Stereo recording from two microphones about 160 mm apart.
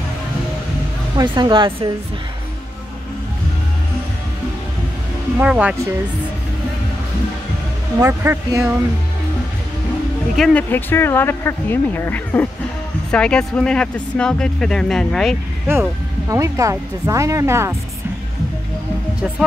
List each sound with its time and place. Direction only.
1.1 s speech: 30° right (ahead or behind)
5.4 s speech: 5° right (ahead or behind)
8.0 s speech: 15° right (ahead or behind)
10.3 s speech: centre (ahead or behind)
10.7 s speech: 15° left (ahead or behind)
15.6 s speech: 15° right (ahead or behind)